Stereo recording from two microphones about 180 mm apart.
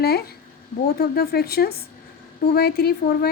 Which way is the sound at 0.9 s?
60° left (ahead or behind).